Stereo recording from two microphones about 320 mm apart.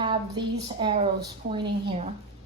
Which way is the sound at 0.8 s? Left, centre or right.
Centre.